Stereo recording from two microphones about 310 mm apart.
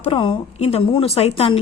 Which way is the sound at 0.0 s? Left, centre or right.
Centre.